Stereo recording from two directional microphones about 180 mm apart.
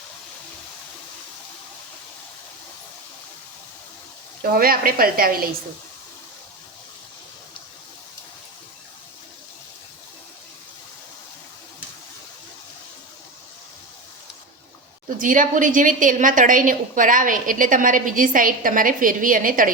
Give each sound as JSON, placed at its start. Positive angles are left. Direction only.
{"t": 4.4, "sound": "a woman's voice", "side_deg": -55}
{"t": 15.2, "sound": "a woman's voice", "side_deg": -45}